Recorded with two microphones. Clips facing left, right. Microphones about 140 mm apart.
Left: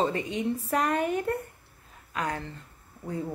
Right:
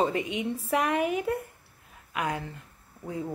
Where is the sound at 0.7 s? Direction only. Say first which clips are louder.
Right 1 dB; 5° right (ahead or behind).